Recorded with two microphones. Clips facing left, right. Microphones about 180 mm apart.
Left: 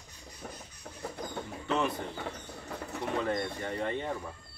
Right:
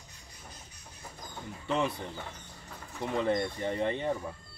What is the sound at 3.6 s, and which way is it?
Speech, 20° right (ahead or behind).